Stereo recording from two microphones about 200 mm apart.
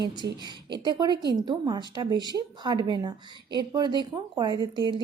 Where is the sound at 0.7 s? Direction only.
20° right (ahead or behind).